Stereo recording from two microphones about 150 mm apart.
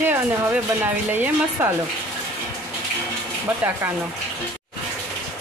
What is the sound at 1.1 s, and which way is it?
Speech, 15° right (ahead or behind).